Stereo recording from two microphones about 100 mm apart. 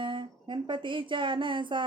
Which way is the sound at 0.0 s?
55° right (ahead or behind).